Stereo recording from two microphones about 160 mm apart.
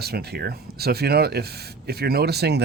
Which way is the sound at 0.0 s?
80° right.